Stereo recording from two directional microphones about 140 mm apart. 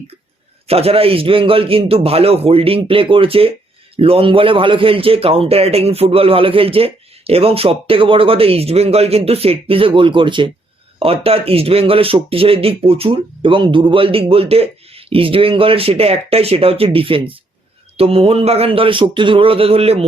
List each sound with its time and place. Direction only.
0.7 s a man's voice: 45° right (ahead or behind)